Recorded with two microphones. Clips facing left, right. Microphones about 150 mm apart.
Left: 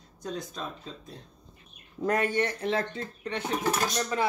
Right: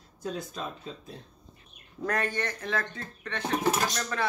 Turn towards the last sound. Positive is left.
turn(degrees=15)  # may be behind; listen again after turning